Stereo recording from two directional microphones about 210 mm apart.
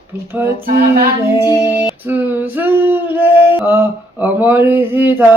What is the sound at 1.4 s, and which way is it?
Female singing, 15° left (ahead or behind).